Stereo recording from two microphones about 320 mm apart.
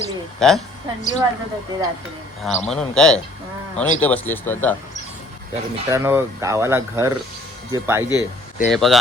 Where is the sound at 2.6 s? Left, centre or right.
Centre.